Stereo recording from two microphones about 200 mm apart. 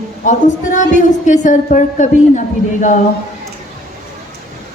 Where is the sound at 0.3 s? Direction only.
40° left (ahead or behind).